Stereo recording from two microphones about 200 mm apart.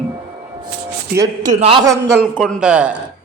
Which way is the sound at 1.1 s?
20° right (ahead or behind).